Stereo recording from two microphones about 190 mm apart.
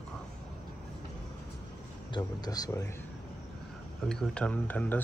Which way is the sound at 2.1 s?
20° left (ahead or behind).